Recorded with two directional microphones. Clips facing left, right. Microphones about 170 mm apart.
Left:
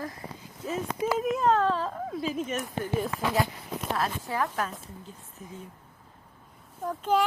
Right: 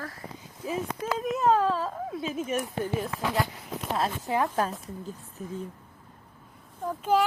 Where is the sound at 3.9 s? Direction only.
20° right (ahead or behind).